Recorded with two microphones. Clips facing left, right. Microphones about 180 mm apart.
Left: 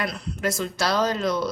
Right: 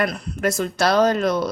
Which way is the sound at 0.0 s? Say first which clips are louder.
Right 5 dB; 55° right (ahead or behind).